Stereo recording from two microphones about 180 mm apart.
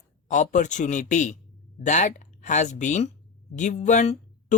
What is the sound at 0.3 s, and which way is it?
Speech, 45° left (ahead or behind).